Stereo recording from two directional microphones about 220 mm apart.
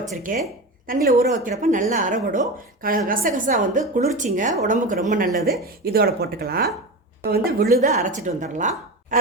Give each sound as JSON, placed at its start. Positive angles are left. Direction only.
{"t": 0.3, "sound": "a woman's voice", "side_deg": -40}